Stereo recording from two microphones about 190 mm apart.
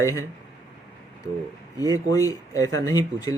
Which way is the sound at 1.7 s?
20° left (ahead or behind).